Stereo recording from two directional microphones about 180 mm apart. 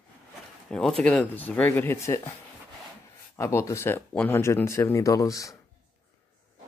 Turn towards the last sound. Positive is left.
turn(degrees=20)  # may be behind; listen again after turning